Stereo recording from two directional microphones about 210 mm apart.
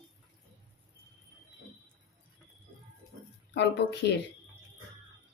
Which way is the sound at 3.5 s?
55° left (ahead or behind).